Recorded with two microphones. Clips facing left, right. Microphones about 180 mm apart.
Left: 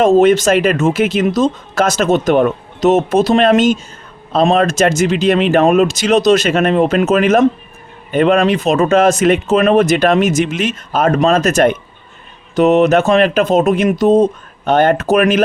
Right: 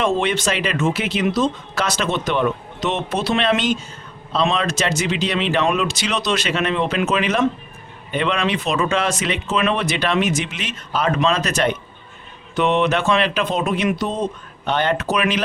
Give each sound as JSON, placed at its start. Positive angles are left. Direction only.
{"t": 0.0, "sound": "speech", "side_deg": 45}